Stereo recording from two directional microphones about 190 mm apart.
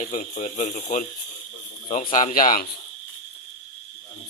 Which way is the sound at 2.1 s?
45° left (ahead or behind).